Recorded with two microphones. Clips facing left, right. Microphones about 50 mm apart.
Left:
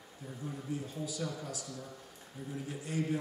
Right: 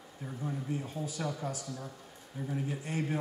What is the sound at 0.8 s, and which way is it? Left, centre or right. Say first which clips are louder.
Speech: right 2 dB; right.